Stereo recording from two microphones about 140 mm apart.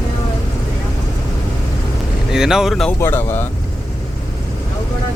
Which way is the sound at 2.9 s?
15° left (ahead or behind).